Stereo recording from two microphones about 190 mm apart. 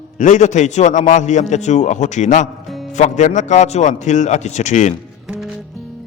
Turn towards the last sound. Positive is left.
turn(degrees=-5)  # may be behind; listen again after turning